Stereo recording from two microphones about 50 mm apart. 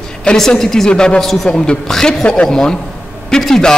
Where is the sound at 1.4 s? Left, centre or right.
Centre.